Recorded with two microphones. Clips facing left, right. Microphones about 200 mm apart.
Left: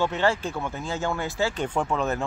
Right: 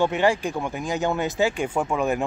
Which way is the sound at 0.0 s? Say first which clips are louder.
Right 3 dB; 15° right (ahead or behind).